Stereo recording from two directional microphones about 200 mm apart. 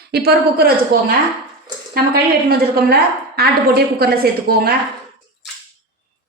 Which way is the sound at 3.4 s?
50° right (ahead or behind).